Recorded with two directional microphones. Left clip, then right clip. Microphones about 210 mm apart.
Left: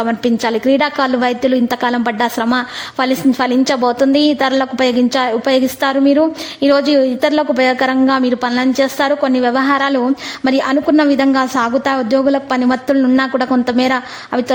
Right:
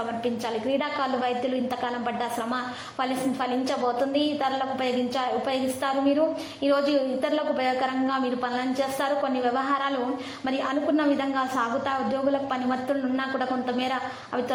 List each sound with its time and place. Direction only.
0.2 s a woman's voice: 50° left (ahead or behind)